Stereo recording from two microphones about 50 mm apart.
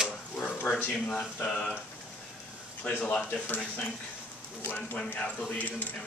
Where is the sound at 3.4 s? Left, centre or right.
Left.